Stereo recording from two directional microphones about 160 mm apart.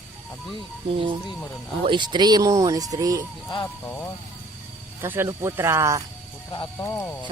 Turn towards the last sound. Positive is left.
turn(degrees=20)  # may be behind; listen again after turning